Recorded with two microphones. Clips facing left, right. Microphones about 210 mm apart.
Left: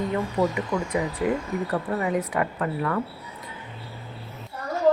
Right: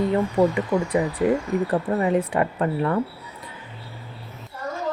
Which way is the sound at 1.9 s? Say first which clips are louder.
Right 4 dB; 30° right (ahead or behind).